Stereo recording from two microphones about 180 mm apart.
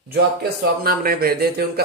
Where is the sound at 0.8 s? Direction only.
55° right (ahead or behind).